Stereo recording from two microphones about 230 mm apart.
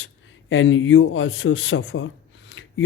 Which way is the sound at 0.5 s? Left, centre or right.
Left.